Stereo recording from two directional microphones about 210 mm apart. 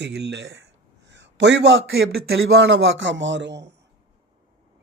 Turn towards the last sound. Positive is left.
turn(degrees=-55)  # may be behind; listen again after turning